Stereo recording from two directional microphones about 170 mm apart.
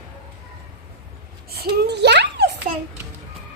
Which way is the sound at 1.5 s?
70° right (ahead or behind).